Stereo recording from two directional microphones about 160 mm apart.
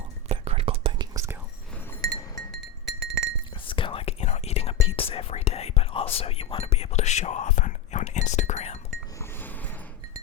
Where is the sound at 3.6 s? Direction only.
30° left (ahead or behind).